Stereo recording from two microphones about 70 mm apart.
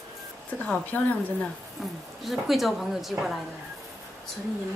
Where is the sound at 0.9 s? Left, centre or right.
Left.